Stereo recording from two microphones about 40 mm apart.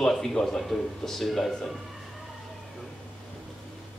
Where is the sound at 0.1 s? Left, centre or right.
Centre.